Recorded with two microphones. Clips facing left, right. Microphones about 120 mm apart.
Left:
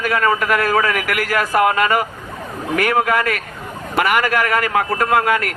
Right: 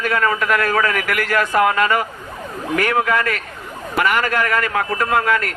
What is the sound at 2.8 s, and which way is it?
Speech, 50° left (ahead or behind).